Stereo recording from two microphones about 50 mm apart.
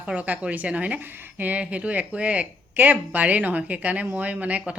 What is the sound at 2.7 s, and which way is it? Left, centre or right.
Speech, right.